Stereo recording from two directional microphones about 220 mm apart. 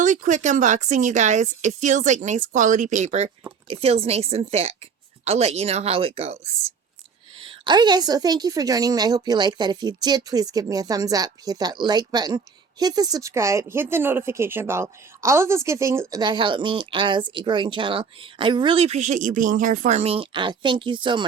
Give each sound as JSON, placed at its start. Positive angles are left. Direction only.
{"t": 0.0, "sound": "a woman's voice", "side_deg": -35}